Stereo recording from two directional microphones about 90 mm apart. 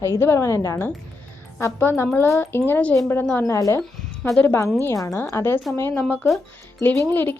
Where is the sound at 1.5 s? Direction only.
25° left (ahead or behind).